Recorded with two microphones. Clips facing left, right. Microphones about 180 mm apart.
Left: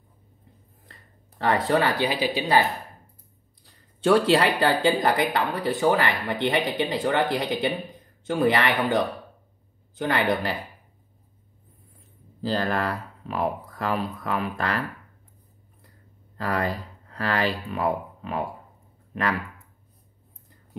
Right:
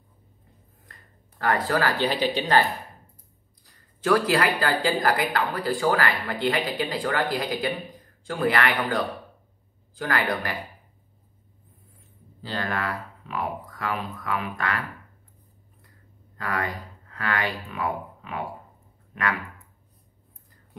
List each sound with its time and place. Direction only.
1.4 s speech: 25° left (ahead or behind)
4.0 s speech: 25° left (ahead or behind)
12.4 s speech: 35° left (ahead or behind)
16.3 s speech: 35° left (ahead or behind)